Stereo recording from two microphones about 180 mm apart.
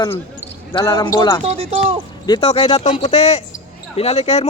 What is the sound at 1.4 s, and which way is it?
Speech, 35° right (ahead or behind).